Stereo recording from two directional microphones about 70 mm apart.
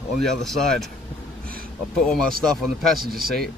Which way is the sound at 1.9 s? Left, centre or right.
Centre.